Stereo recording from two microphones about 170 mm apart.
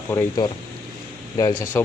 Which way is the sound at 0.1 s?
20° left (ahead or behind).